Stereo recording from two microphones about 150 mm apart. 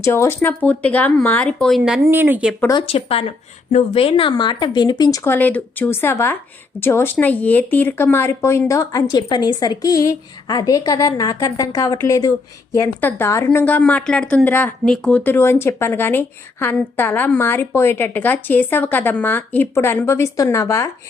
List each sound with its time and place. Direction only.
0.0 s a woman's voice: 20° left (ahead or behind)
2.0 s speech: 15° right (ahead or behind)
2.8 s a woman's voice: 40° left (ahead or behind); by 20.9 s 20° left (ahead or behind)